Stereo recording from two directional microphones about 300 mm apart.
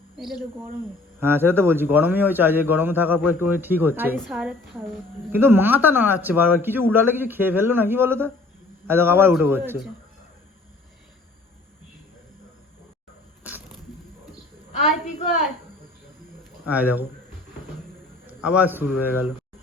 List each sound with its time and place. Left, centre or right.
0.2 s a man's voice: centre
13.4 s a sound: centre
16.6 s a man's voice: centre
18.3 s a man's voice: centre